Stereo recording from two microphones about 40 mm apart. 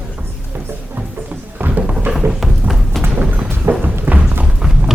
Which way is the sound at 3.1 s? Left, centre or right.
Right.